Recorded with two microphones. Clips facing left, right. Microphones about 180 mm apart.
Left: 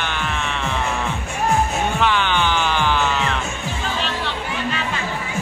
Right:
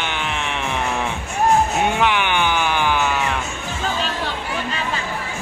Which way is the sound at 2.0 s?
15° right (ahead or behind).